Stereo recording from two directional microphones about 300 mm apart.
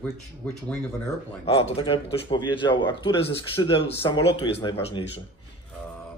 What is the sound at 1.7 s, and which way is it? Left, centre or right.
Speech, centre.